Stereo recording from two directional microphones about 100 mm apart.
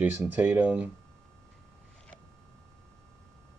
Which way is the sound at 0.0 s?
15° right (ahead or behind).